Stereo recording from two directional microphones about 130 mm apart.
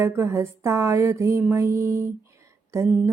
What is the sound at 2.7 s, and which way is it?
Speech, 20° right (ahead or behind).